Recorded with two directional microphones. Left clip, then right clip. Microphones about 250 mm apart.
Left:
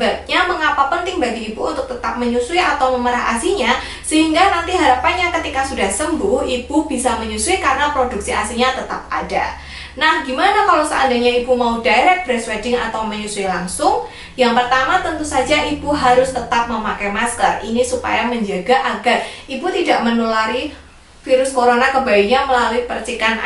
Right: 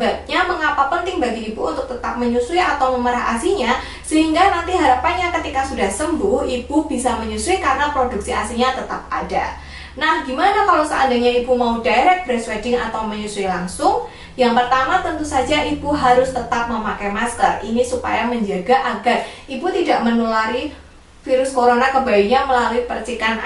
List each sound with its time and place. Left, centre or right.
0.0 s a sound: centre
1.6 s a man's voice: centre
2.0 s a woman's voice: centre